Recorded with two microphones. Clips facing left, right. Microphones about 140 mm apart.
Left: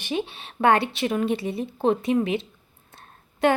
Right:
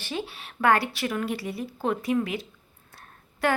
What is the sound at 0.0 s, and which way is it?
Speech, 20° left (ahead or behind).